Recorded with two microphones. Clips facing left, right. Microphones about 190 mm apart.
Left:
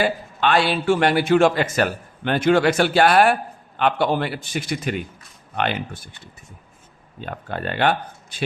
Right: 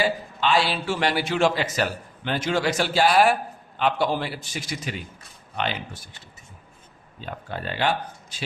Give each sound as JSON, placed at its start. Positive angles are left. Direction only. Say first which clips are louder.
{"t": 0.0, "sound": "a man's voice", "louder": "left 3 dB", "side_deg": 55}
{"t": 7.2, "sound": "a man's voice", "louder": "left 4 dB", "side_deg": 55}